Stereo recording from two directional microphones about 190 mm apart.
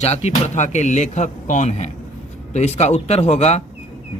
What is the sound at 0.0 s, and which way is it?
A man's voice, 35° left (ahead or behind).